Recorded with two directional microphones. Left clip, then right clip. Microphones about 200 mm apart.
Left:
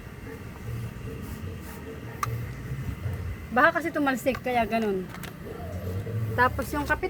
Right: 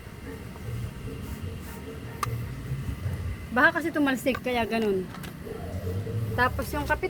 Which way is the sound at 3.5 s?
15° left (ahead or behind).